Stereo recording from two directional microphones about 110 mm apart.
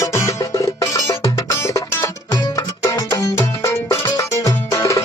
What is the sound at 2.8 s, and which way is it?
Music, 30° left (ahead or behind).